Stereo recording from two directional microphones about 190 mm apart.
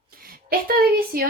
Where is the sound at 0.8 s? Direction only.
55° right (ahead or behind).